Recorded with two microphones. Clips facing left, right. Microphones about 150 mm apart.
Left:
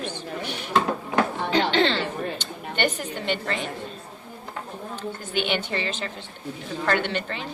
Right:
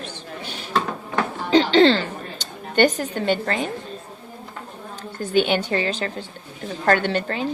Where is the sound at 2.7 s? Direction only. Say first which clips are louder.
Right 8 dB; 40° right (ahead or behind).